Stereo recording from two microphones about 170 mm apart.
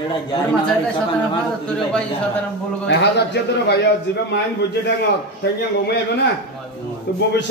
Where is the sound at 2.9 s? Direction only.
85° left.